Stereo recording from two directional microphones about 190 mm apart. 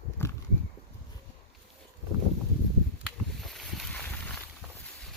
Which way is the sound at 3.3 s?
Centre (ahead or behind).